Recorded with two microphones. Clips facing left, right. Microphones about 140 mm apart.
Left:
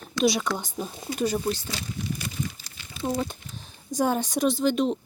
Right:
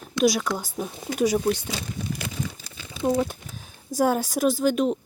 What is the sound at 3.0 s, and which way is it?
A woman's voice, 10° right (ahead or behind).